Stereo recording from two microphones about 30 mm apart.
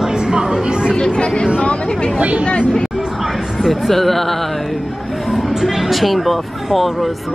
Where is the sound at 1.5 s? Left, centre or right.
Left.